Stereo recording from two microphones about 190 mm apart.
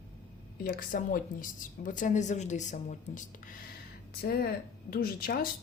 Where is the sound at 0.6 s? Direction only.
50° left (ahead or behind).